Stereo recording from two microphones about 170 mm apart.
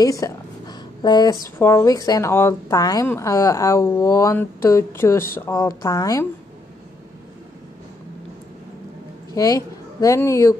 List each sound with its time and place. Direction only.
0.0 s speech: 20° left (ahead or behind)
9.3 s speech: 20° left (ahead or behind)